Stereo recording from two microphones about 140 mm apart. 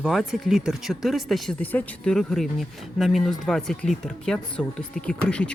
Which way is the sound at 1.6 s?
10° left (ahead or behind).